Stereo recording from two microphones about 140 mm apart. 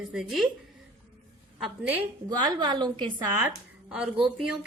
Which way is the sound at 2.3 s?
30° right (ahead or behind).